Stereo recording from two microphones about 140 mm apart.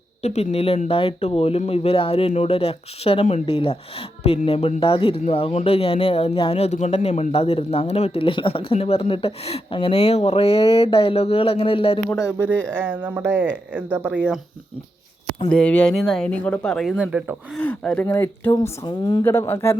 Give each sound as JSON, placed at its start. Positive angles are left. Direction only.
{"t": 0.2, "sound": "speech", "side_deg": 50}
{"t": 12.0, "sound": "speech", "side_deg": 20}
{"t": 12.4, "sound": "speech", "side_deg": 10}
{"t": 12.8, "sound": "speech", "side_deg": -15}
{"t": 15.5, "sound": "speech", "side_deg": 10}
{"t": 17.5, "sound": "speech", "side_deg": 10}
{"t": 18.9, "sound": "speech", "side_deg": 30}
{"t": 19.2, "sound": "speech", "side_deg": 15}